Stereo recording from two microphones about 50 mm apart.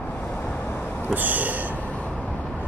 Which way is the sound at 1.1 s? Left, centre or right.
Right.